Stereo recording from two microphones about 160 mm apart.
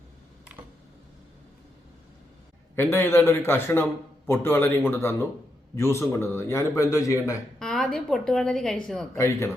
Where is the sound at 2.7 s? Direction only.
15° left (ahead or behind).